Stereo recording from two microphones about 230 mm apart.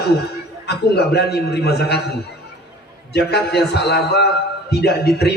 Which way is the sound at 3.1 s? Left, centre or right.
Left.